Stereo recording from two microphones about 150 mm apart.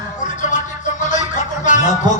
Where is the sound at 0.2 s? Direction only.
55° left (ahead or behind).